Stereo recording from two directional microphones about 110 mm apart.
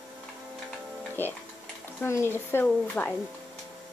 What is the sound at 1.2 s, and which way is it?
A woman's voice, 20° left (ahead or behind).